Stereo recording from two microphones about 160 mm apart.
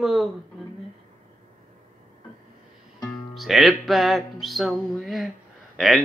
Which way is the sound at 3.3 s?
Centre (ahead or behind).